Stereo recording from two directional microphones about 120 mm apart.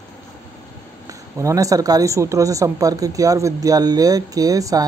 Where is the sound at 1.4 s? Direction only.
25° right (ahead or behind).